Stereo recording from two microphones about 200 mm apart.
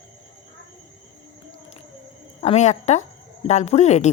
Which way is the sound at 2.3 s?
30° left (ahead or behind).